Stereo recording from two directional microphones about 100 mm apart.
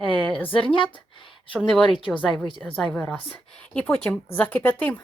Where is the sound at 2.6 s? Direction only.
15° left (ahead or behind).